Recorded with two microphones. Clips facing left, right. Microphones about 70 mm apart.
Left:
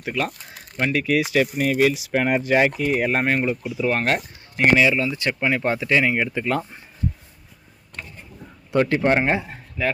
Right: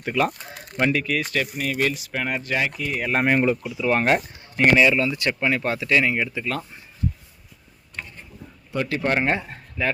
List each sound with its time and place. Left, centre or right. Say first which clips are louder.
0.0 s speech: right 3 dB; centre
3.1 s speech: right 1 dB; centre
3.6 s speech: left 1 dB; centre
3.9 s speech: right 2 dB; centre
4.6 s speech: even; centre
5.1 s speech: even; left
9.0 s speech: left 3 dB; centre